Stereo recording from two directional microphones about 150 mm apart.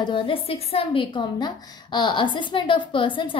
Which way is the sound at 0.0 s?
35° left (ahead or behind).